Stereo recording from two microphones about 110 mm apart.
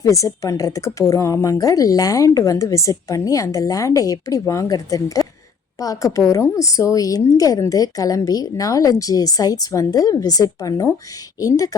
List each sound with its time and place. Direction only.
0.0 s a woman's voice: 30° left (ahead or behind)